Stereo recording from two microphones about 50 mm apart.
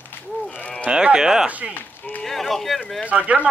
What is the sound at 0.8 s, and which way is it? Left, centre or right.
Speech, centre.